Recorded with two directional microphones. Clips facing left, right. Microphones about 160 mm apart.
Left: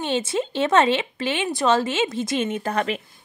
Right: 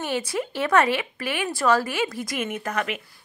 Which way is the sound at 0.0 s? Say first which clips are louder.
Left 3 dB; 25° left (ahead or behind).